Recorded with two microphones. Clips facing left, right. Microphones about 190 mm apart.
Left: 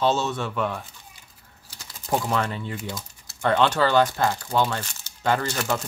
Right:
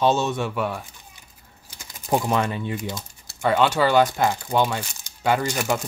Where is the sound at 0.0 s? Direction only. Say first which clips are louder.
Right 2 dB; 15° right (ahead or behind).